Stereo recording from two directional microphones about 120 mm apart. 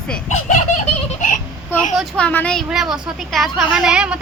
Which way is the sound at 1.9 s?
Centre (ahead or behind).